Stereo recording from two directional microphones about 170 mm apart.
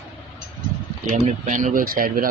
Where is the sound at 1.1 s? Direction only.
45° right (ahead or behind).